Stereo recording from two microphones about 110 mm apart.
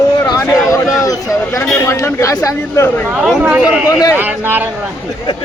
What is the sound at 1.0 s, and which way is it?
Speech, 30° left (ahead or behind).